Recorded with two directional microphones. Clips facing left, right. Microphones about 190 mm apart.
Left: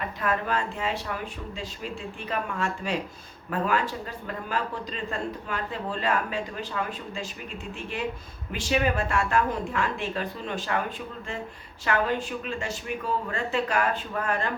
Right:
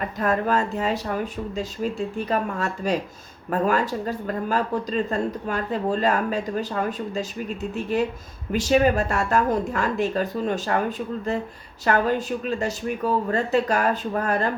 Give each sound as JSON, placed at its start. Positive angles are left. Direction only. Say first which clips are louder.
{"t": 0.2, "sound": "speech", "louder": "right 6 dB", "side_deg": -40}